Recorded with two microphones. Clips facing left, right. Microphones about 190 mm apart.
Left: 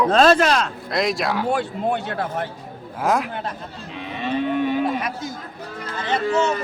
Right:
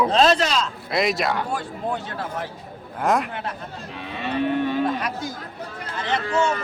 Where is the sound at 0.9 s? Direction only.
Centre (ahead or behind).